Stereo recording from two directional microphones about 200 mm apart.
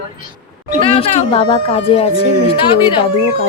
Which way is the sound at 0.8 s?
30° left (ahead or behind).